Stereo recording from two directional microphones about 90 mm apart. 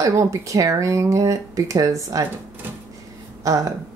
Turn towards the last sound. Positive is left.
turn(degrees=-40)  # may be behind; listen again after turning